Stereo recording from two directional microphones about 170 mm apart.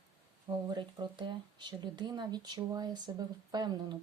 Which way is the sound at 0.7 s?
25° right (ahead or behind).